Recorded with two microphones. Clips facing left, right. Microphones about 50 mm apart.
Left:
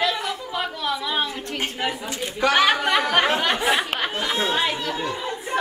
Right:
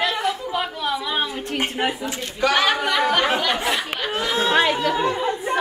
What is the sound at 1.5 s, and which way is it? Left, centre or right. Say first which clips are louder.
Speech: right 3 dB; right.